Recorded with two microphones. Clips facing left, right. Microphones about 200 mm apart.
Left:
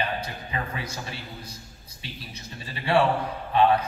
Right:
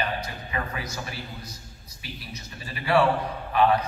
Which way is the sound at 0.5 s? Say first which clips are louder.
Right 1 dB; 30° left (ahead or behind).